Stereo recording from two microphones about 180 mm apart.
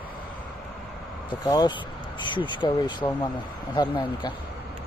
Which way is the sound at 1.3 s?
20° left (ahead or behind).